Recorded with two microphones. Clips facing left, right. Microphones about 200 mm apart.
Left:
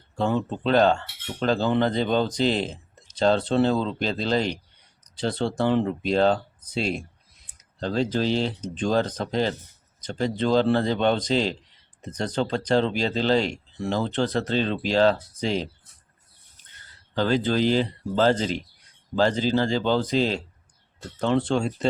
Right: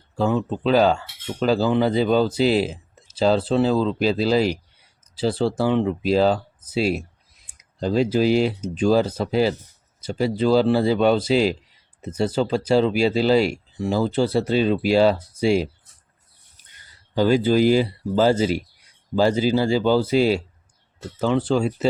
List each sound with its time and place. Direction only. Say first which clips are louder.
0.2 s speech: right 3 dB; centre (ahead or behind)